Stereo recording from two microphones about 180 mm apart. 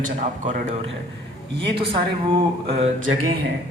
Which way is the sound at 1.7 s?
30° right (ahead or behind).